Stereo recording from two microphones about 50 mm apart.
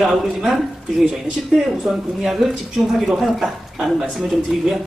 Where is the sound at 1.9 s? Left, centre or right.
Centre.